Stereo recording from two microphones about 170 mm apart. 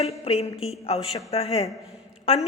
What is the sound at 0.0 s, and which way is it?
A woman's voice, 35° left (ahead or behind).